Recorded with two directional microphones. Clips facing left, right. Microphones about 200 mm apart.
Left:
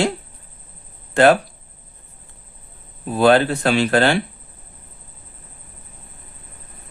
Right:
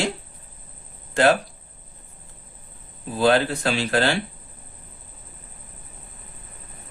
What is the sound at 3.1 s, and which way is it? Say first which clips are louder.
Speech: left 5 dB; 60° left (ahead or behind).